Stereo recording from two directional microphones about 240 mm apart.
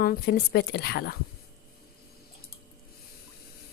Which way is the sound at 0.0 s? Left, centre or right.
Left.